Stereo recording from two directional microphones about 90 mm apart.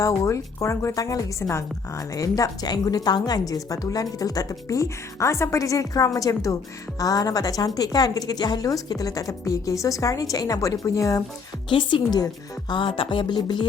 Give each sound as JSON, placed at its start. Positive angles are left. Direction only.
{"t": 0.0, "sound": "a woman's voice", "side_deg": 35}
{"t": 11.7, "sound": "music", "side_deg": 65}
{"t": 12.2, "sound": "a woman's voice", "side_deg": 50}
{"t": 12.8, "sound": "music", "side_deg": 75}